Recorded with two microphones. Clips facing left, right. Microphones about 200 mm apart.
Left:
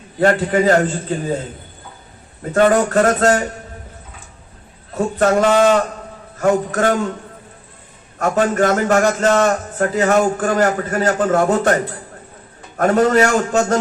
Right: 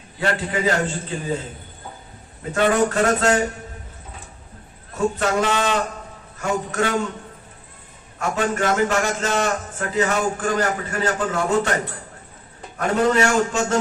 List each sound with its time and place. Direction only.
0.2 s a man's voice: 45° left (ahead or behind)
2.5 s a man's voice: 40° left (ahead or behind)
4.9 s a man's voice: 50° left (ahead or behind)
8.2 s a man's voice: 40° left (ahead or behind)
9.5 s a man's voice: 40° left (ahead or behind)